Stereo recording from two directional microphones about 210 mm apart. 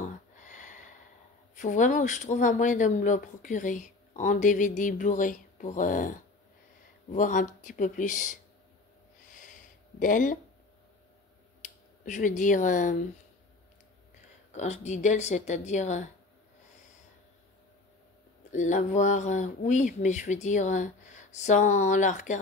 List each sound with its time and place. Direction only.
0.4 s a sound: 35° left (ahead or behind)
1.5 s speech: 35° left (ahead or behind)
9.3 s a sound: 40° left (ahead or behind)
11.6 s speech: 40° left (ahead or behind)
14.5 s speech: 35° left (ahead or behind)
18.5 s speech: 35° left (ahead or behind)